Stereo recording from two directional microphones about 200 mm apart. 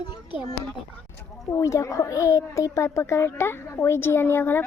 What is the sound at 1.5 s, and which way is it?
A child's voice, 15° left (ahead or behind).